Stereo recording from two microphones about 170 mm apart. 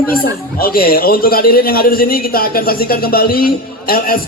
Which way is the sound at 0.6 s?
60° left (ahead or behind).